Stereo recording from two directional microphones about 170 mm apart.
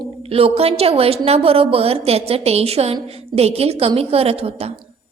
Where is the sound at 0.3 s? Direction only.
35° right (ahead or behind).